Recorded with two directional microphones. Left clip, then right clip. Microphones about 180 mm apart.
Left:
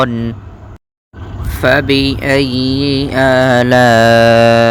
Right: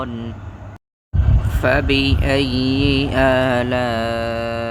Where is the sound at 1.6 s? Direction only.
25° left (ahead or behind).